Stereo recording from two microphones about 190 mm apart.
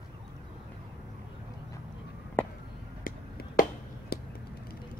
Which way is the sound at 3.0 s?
50° left (ahead or behind).